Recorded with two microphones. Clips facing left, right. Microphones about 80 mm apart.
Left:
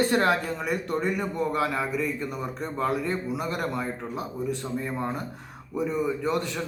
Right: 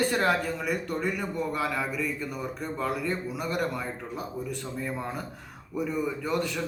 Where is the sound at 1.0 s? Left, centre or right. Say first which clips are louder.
Left 3 dB; left.